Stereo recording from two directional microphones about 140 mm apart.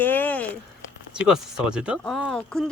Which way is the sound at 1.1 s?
5° right (ahead or behind).